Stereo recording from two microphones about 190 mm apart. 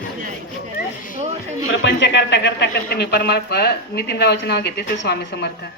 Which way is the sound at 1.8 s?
70° left (ahead or behind).